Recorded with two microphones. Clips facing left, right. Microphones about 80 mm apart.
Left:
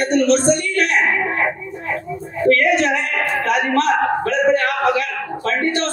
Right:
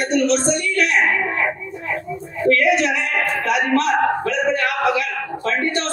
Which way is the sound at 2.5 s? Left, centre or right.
Left.